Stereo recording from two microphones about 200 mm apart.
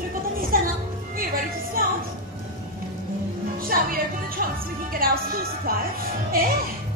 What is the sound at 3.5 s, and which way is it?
Music, 45° right (ahead or behind).